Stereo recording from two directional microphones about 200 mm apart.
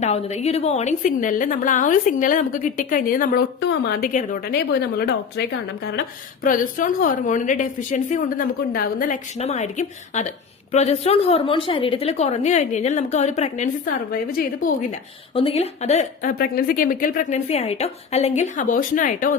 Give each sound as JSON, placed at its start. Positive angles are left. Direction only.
{"t": 0.0, "sound": "a woman's voice", "side_deg": 35}
{"t": 4.1, "sound": "a woman's voice", "side_deg": 40}
{"t": 6.4, "sound": "a woman's voice", "side_deg": 40}
{"t": 15.4, "sound": "a woman's voice", "side_deg": 30}